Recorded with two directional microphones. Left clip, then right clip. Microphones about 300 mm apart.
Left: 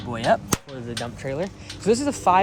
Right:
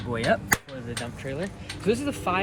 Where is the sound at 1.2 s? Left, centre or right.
Centre.